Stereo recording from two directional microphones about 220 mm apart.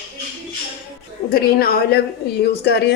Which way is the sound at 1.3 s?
45° left (ahead or behind).